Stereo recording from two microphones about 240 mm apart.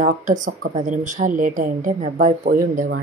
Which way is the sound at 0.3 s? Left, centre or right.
Right.